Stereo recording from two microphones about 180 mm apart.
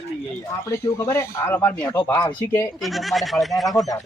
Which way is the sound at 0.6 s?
15° left (ahead or behind).